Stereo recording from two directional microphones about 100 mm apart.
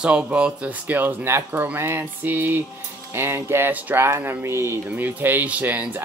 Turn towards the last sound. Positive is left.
turn(degrees=-15)  # may be behind; listen again after turning